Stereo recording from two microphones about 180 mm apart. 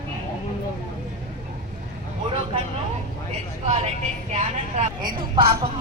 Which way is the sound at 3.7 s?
35° right (ahead or behind).